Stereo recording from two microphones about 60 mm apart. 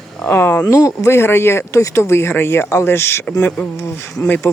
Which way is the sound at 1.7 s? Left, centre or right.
Left.